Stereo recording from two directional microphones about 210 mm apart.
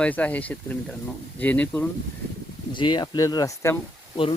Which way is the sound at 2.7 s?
20° left (ahead or behind).